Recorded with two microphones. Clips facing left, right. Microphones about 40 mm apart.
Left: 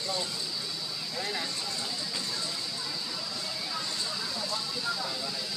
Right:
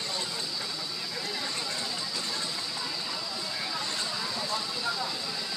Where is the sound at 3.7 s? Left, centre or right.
Right.